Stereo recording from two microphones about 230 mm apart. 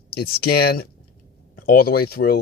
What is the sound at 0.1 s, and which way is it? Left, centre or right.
Speech, left.